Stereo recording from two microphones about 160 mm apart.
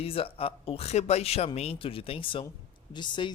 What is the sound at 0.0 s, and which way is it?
Speech, 35° left (ahead or behind).